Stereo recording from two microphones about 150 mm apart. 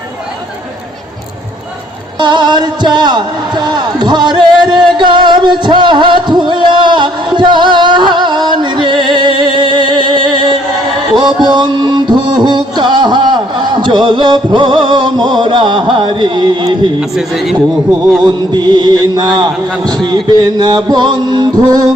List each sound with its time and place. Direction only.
2.1 s a sound: 30° right (ahead or behind)
11.1 s music: 30° right (ahead or behind)
17.0 s a man's voice: centre (ahead or behind)
18.2 s a man's voice: 30° right (ahead or behind)